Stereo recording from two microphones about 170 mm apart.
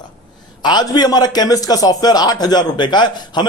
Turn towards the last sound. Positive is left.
turn(degrees=25)  # may be behind; listen again after turning